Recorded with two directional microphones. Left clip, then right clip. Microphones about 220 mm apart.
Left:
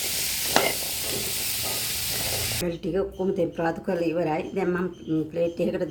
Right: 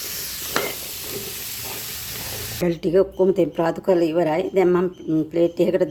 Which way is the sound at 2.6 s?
50° right (ahead or behind).